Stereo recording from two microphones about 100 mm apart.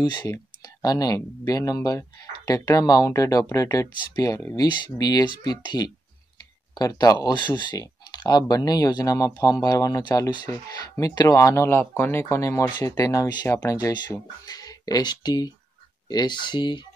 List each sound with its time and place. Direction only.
0.8 s speech: 40° left (ahead or behind)